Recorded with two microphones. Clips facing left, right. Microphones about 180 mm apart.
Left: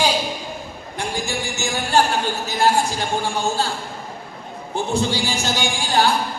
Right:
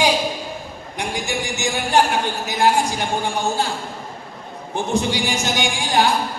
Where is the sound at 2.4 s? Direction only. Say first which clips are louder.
Right 1 dB; 15° right (ahead or behind).